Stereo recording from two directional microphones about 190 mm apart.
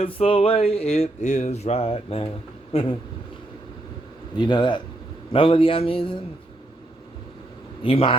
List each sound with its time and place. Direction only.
0.0 s a sound: 30° left (ahead or behind)
4.4 s speech: 25° left (ahead or behind)
7.8 s speech: 30° left (ahead or behind)